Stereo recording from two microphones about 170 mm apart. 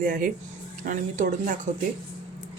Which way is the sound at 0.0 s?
60° right (ahead or behind).